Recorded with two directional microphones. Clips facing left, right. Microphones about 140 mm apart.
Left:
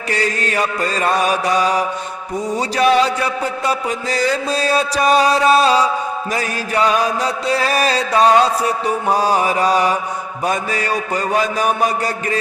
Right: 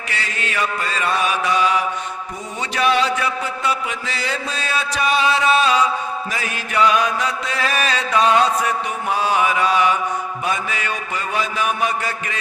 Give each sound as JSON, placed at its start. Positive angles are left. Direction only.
{"t": 0.1, "sound": "music", "side_deg": 40}